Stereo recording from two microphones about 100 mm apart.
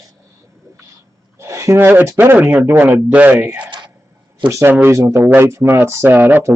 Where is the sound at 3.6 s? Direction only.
55° right (ahead or behind).